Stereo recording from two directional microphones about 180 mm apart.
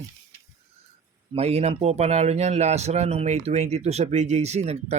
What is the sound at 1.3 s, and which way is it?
A man's voice, 35° right (ahead or behind).